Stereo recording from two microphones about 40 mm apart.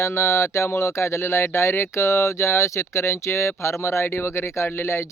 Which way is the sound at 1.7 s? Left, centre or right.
Left.